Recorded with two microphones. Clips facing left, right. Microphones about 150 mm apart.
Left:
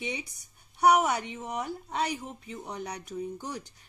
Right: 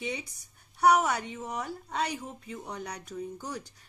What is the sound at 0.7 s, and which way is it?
A woman's voice, 10° left (ahead or behind).